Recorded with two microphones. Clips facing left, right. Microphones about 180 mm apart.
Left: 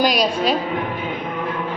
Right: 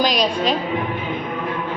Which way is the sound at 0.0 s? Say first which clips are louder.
Left 1 dB; 10° left (ahead or behind).